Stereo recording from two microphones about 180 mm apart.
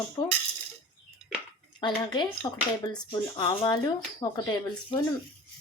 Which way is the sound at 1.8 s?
25° left (ahead or behind).